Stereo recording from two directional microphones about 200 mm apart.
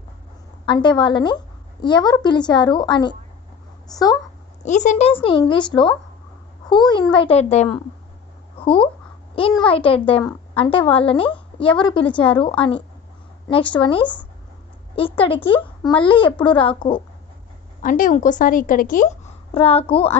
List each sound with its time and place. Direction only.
0.7 s a child's voice: 25° left (ahead or behind)
4.6 s a child's voice: 35° left (ahead or behind)
6.7 s a child's voice: 20° left (ahead or behind)
17.8 s a woman's voice: 40° left (ahead or behind)